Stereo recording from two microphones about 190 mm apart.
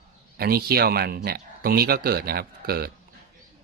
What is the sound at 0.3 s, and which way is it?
Speech, 55° right (ahead or behind).